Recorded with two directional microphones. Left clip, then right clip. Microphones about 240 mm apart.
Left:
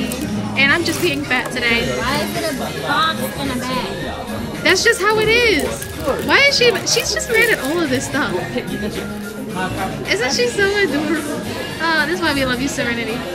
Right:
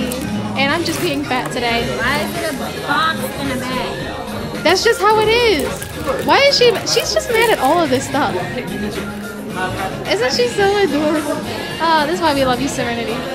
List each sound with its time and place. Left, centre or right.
0.6 s a woman's voice: centre
4.6 s speech: centre
10.0 s speech: centre